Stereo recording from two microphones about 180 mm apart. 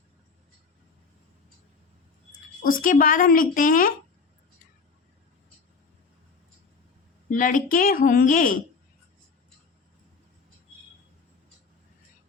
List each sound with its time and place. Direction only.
2.6 s a woman's voice: 50° left (ahead or behind)
7.3 s a woman's voice: 45° left (ahead or behind)